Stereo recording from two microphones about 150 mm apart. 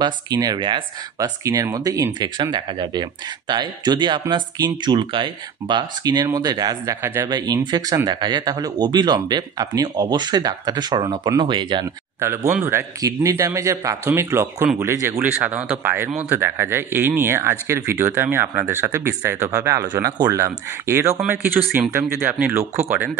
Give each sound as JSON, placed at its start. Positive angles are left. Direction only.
{"t": 0.0, "sound": "speech", "side_deg": -25}
{"t": 12.2, "sound": "speech", "side_deg": -15}